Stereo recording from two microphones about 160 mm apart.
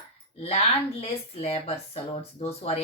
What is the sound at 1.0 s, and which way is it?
Speech, 40° left (ahead or behind).